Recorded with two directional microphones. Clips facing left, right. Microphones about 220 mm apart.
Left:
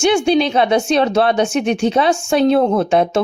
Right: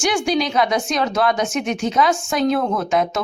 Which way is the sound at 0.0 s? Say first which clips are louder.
Left 6 dB; 25° left (ahead or behind).